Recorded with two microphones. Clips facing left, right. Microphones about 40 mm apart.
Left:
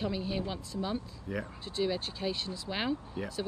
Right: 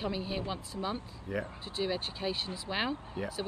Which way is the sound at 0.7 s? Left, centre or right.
Right.